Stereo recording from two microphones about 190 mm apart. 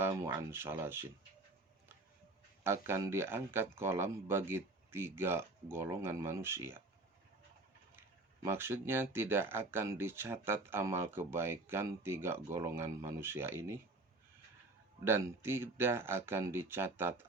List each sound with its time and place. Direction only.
0.0 s speech: 15° right (ahead or behind)
2.6 s speech: 15° right (ahead or behind)
8.4 s speech: 10° right (ahead or behind)
15.0 s speech: 10° right (ahead or behind)